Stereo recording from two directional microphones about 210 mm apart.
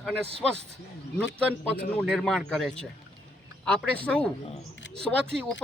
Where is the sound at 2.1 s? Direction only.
Centre (ahead or behind).